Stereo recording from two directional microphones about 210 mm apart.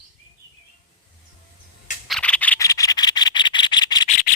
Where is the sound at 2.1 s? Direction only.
5° left (ahead or behind).